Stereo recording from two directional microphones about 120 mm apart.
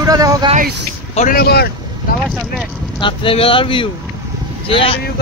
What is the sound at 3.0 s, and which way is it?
Speech, 45° left (ahead or behind).